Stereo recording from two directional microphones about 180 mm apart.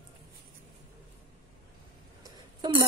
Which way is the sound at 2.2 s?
25° right (ahead or behind).